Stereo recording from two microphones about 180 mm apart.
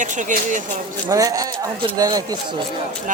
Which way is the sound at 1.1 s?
20° right (ahead or behind).